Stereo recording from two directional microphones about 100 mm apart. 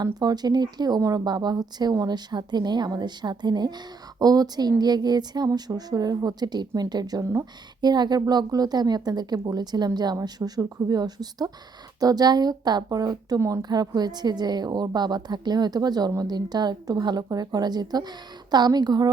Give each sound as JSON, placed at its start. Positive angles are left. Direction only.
{"t": 0.0, "sound": "a woman's voice", "side_deg": -40}